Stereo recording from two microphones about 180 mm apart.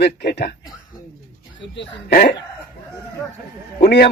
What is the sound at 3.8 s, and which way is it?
Speech, 60° left (ahead or behind).